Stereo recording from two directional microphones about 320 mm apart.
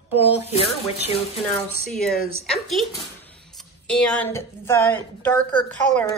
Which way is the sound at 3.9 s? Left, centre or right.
Centre.